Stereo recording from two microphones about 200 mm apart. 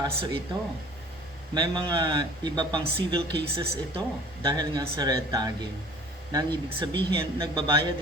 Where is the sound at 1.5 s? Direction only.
20° right (ahead or behind).